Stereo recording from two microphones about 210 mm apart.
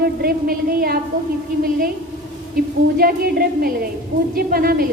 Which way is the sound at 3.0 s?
45° right (ahead or behind).